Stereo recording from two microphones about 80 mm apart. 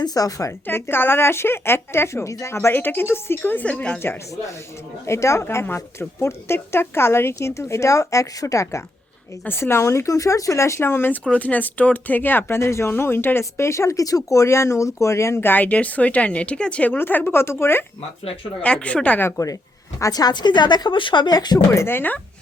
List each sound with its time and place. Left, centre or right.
0.0 s speech: left
0.7 s speech: left; by 4.0 s centre
5.0 s speech: left
11.2 s speech: centre
18.6 s a woman's voice: centre
20.0 s speech: left
21.7 s speech: left